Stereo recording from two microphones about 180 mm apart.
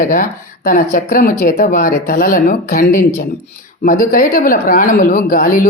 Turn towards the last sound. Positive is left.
turn(degrees=50)  # may be behind; listen again after turning